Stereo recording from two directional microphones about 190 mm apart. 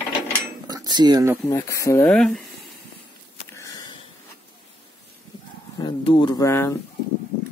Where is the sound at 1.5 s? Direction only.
15° left (ahead or behind).